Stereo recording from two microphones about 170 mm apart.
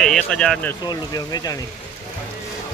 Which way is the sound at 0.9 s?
20° left (ahead or behind).